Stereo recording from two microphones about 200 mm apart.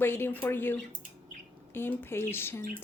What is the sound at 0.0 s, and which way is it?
Speech, 10° left (ahead or behind).